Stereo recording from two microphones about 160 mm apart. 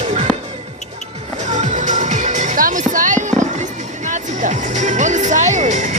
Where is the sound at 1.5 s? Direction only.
50° right (ahead or behind).